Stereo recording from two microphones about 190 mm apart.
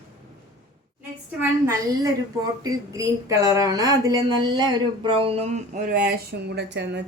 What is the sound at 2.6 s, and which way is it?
Speech, 15° right (ahead or behind).